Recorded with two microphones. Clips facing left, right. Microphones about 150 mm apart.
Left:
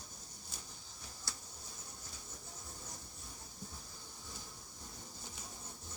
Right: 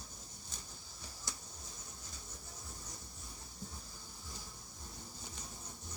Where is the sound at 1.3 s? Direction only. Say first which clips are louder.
Right 2 dB; 20° right (ahead or behind).